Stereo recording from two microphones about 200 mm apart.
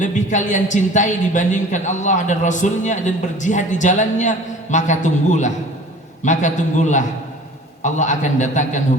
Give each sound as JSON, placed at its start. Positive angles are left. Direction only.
{"t": 0.0, "sound": "a woman's voice", "side_deg": 40}